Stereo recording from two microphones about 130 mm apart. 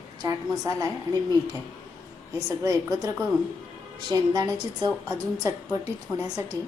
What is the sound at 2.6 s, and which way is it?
A woman's voice, 25° right (ahead or behind).